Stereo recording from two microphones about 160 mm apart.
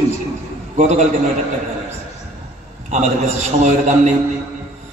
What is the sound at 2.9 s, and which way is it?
A man's voice, 50° right (ahead or behind).